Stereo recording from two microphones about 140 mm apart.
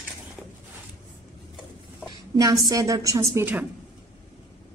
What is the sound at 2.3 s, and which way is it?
A woman's voice, 25° right (ahead or behind).